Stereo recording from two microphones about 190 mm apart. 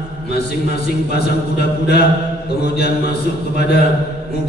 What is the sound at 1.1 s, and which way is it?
Mantra, 60° left (ahead or behind).